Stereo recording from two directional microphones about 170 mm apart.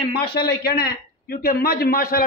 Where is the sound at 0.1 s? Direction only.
70° left (ahead or behind).